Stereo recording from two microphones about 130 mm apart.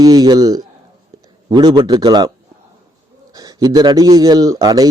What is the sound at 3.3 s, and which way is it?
Speech, 30° right (ahead or behind).